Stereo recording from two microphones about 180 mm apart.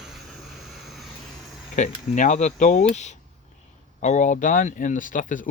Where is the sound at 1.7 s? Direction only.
45° left (ahead or behind).